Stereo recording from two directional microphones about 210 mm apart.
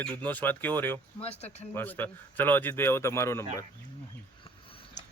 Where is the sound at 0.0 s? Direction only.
5° left (ahead or behind).